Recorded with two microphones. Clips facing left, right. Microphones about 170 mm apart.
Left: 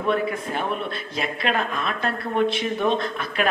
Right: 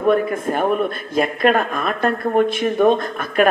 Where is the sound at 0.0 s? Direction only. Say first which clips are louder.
Right 6 dB; 50° right (ahead or behind).